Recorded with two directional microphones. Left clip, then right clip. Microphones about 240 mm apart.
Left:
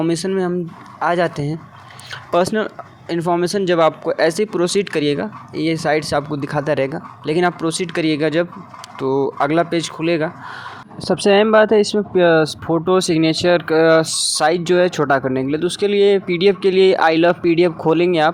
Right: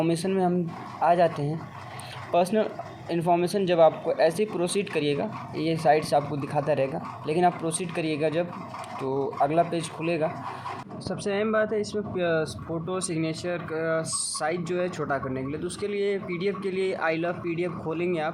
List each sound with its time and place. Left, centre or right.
0.2 s speech: left
2.3 s speech: left